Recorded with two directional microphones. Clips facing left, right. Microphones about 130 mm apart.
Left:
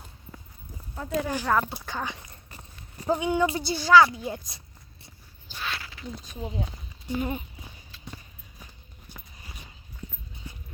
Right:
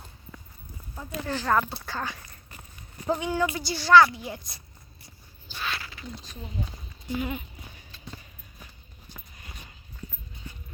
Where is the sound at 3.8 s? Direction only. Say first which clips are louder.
Even; 10° left (ahead or behind).